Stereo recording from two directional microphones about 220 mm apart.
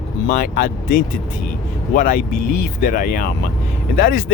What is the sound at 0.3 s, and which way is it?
Speech, 40° left (ahead or behind).